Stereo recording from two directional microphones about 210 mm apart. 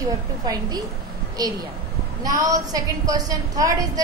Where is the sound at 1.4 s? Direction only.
20° right (ahead or behind).